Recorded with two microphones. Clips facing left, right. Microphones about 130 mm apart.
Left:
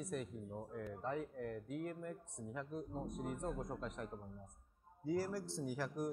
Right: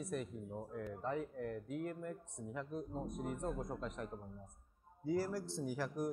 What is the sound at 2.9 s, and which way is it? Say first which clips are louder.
Speech: right 1 dB; 25° right (ahead or behind).